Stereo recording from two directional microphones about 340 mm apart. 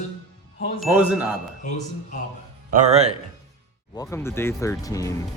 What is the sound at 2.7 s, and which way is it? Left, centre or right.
Speech, centre.